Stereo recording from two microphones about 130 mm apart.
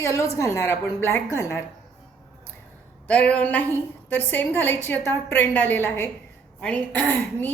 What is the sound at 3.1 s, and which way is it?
A woman's voice, 10° left (ahead or behind).